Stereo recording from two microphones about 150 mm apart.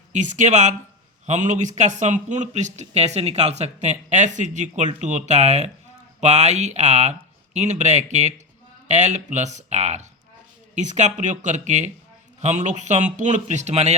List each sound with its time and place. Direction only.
0.1 s speech: 55° right (ahead or behind)